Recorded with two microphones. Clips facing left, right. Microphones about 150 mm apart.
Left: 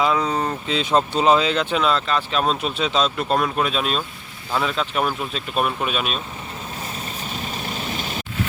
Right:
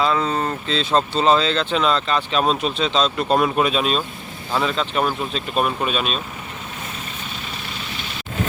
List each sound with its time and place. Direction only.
0.0 s speech: 10° left (ahead or behind)
7.5 s vehicle: 40° left (ahead or behind)